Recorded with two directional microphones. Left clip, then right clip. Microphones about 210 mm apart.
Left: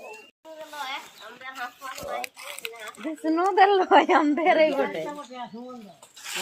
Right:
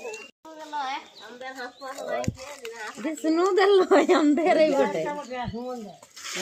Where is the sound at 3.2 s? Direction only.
35° right (ahead or behind).